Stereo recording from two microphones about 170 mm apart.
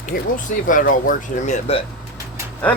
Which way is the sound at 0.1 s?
55° left (ahead or behind).